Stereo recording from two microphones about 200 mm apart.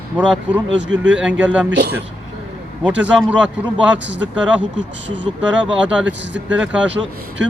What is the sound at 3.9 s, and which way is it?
Speech, 65° right (ahead or behind).